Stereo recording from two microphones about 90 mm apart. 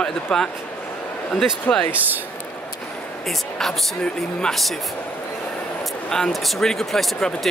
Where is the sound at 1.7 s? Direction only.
20° left (ahead or behind).